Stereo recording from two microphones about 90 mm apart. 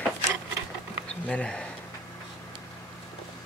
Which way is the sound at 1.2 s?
10° left (ahead or behind).